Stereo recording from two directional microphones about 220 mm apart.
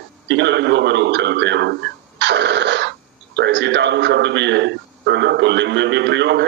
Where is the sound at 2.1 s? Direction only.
50° right (ahead or behind).